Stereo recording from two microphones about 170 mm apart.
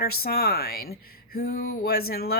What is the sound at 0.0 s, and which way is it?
Speech, 65° left (ahead or behind).